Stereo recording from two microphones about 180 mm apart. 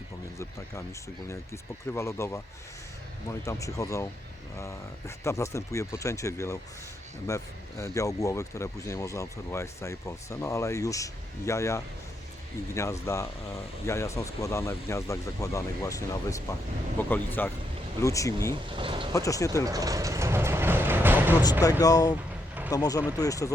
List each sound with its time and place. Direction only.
1.9 s speech: 15° left (ahead or behind)
3.4 s speech: 15° left (ahead or behind)
18.8 s speech: 30° right (ahead or behind)
19.1 s speech: 20° left (ahead or behind)
19.6 s speech: 20° right (ahead or behind)
21.6 s speech: 20° left (ahead or behind)